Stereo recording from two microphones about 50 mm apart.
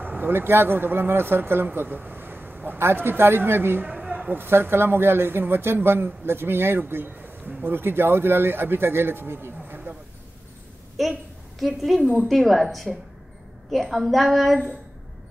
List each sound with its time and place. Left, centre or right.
0.2 s speech: right
2.8 s a man's voice: right
3.8 s a sound: centre
4.3 s a man's voice: right
7.2 s a sound: right
7.7 s a man's voice: right
11.0 s a woman's voice: centre